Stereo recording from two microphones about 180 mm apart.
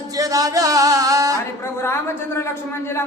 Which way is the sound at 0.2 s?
20° right (ahead or behind).